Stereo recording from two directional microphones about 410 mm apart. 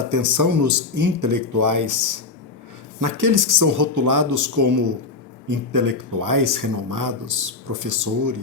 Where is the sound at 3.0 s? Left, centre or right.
Right.